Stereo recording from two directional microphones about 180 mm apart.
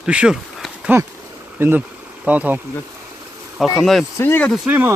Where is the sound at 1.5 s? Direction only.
10° right (ahead or behind).